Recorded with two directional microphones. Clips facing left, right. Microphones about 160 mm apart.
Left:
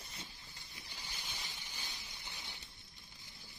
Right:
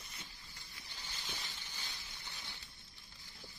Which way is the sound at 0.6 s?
15° left (ahead or behind).